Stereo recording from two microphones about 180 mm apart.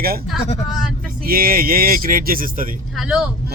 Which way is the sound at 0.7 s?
Centre (ahead or behind).